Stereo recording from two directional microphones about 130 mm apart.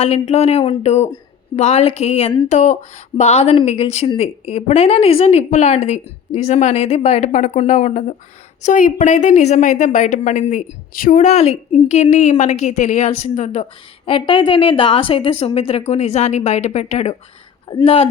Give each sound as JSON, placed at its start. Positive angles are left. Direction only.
{"t": 0.0, "sound": "a woman's voice", "side_deg": 55}
{"t": 2.5, "sound": "a woman's voice", "side_deg": 65}
{"t": 8.6, "sound": "a woman's voice", "side_deg": 75}
{"t": 14.0, "sound": "a woman's voice", "side_deg": 40}
{"t": 17.8, "sound": "a woman's voice", "side_deg": 45}